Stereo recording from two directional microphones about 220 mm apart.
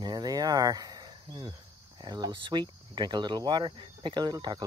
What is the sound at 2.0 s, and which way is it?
Speech, 15° right (ahead or behind).